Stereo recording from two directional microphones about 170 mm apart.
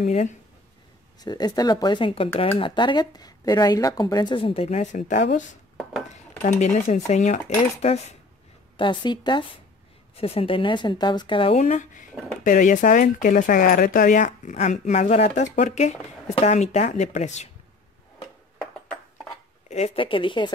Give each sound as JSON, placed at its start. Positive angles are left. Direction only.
{"t": 0.0, "sound": "speech", "side_deg": 45}
{"t": 1.2, "sound": "speech", "side_deg": 25}
{"t": 6.6, "sound": "speech", "side_deg": 40}
{"t": 8.7, "sound": "speech", "side_deg": 30}
{"t": 19.7, "sound": "speech", "side_deg": 35}